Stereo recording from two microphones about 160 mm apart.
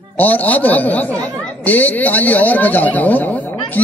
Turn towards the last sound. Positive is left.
turn(degrees=10)  # may be behind; listen again after turning